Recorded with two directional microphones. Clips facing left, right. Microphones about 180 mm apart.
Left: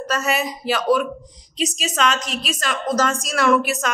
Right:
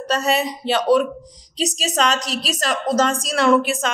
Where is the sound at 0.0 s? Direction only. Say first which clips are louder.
Right 2 dB; 35° right (ahead or behind).